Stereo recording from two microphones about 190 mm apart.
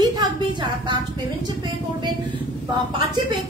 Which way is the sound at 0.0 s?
20° right (ahead or behind).